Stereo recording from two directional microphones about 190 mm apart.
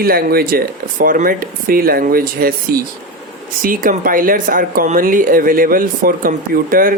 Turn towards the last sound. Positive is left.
turn(degrees=-50)  # may be behind; listen again after turning